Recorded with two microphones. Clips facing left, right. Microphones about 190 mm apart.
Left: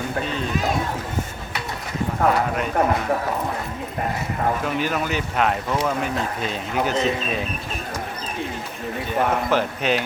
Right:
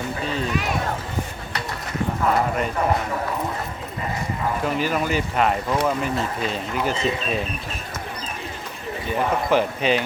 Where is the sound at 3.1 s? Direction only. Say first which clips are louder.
Left 4 dB; 60° left (ahead or behind).